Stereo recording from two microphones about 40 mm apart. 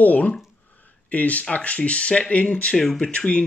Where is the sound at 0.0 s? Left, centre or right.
Left.